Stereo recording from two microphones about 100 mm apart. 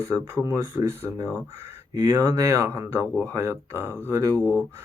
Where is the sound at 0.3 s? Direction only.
30° right (ahead or behind).